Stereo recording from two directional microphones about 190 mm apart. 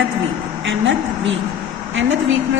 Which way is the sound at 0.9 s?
80° right.